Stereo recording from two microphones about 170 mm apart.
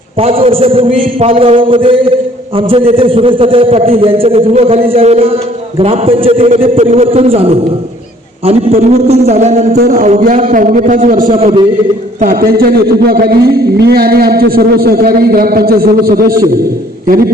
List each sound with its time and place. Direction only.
0.2 s a man's voice: 35° right (ahead or behind); by 11.3 s 50° right (ahead or behind)
11.3 s a man's voice: 35° right (ahead or behind)
12.2 s a man's voice: 60° right (ahead or behind)